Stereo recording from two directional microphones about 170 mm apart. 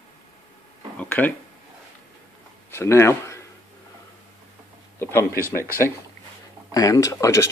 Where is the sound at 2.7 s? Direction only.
15° left (ahead or behind).